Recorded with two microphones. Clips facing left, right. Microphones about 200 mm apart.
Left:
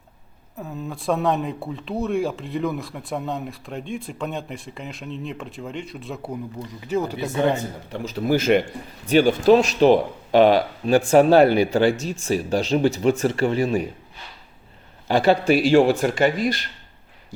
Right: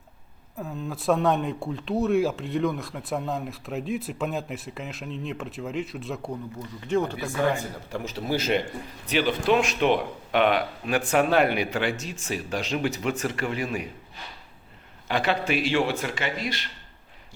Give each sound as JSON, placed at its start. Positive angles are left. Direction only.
{"t": 0.6, "sound": "speech", "side_deg": 0}
{"t": 7.2, "sound": "speech", "side_deg": 20}
{"t": 8.3, "sound": "a man's voice", "side_deg": 50}
{"t": 15.0, "sound": "speech", "side_deg": 35}